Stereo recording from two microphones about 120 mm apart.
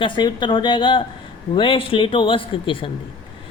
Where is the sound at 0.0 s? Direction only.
40° left (ahead or behind).